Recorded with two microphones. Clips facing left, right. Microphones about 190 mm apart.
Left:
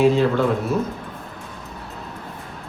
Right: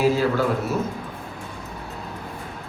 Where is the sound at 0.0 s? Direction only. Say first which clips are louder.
Left 3 dB; 5° right (ahead or behind).